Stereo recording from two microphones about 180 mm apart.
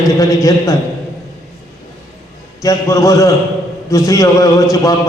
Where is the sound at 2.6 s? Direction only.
20° left (ahead or behind).